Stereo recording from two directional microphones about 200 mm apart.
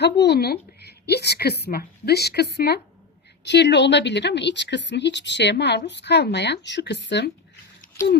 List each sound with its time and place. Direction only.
0.0 s a woman's voice: 55° left (ahead or behind)